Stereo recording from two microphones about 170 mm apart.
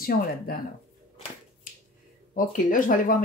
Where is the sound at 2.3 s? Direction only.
55° left (ahead or behind).